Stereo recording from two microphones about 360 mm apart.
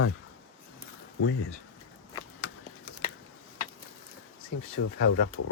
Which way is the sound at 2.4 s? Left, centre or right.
Left.